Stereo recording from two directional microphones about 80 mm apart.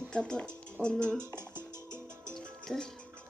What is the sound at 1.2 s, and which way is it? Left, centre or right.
Music, right.